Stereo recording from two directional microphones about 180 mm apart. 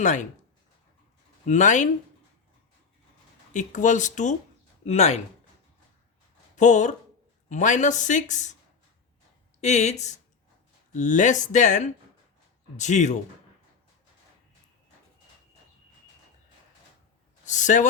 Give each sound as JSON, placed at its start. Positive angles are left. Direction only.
{"t": 0.0, "sound": "speech", "side_deg": 45}
{"t": 1.5, "sound": "speech", "side_deg": 45}
{"t": 3.5, "sound": "speech", "side_deg": 45}
{"t": 6.6, "sound": "speech", "side_deg": 40}
{"t": 9.6, "sound": "speech", "side_deg": 40}
{"t": 17.4, "sound": "speech", "side_deg": 45}